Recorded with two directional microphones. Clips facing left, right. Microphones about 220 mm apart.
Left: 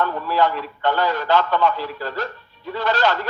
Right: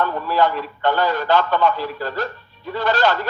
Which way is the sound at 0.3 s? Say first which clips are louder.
Right 1 dB; 45° right (ahead or behind).